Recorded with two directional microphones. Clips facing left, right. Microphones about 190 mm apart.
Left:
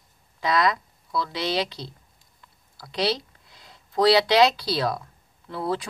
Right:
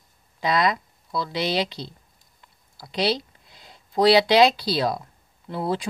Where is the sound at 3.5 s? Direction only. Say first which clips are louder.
Right 1 dB; 20° right (ahead or behind).